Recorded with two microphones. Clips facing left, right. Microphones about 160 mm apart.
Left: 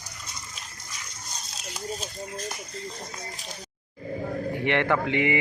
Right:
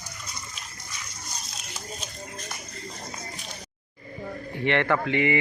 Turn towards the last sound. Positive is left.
turn(degrees=15)  # may be behind; listen again after turning